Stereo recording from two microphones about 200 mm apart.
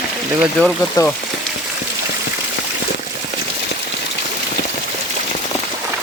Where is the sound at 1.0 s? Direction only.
20° left (ahead or behind).